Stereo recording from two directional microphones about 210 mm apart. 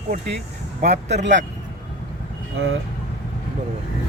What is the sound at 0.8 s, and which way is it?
Speech, 35° right (ahead or behind).